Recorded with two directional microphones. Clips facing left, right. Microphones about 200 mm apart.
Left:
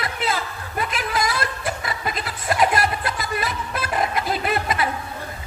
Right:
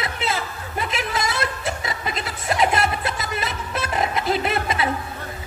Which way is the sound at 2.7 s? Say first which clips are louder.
Even; 25° right (ahead or behind).